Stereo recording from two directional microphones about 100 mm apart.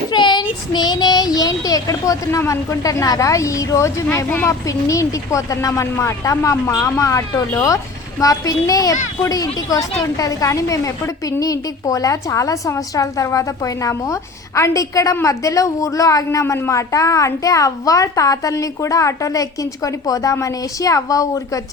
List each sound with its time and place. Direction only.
0.1 s child singing: 50° left (ahead or behind)
2.4 s a woman's voice: 30° left (ahead or behind)